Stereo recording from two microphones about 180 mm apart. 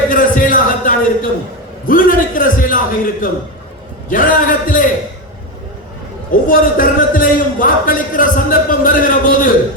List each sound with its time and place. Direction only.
0.1 s a sound: 50° left (ahead or behind)
4.1 s a man's voice: 50° left (ahead or behind)
6.5 s a man's voice: 50° left (ahead or behind)